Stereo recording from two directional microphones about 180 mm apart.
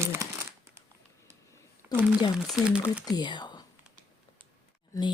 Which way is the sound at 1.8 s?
10° right (ahead or behind).